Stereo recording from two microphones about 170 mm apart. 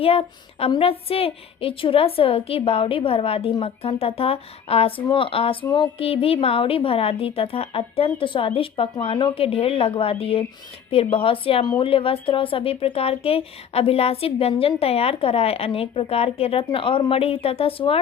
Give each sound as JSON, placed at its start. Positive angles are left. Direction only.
{"t": 0.0, "sound": "speech", "side_deg": 35}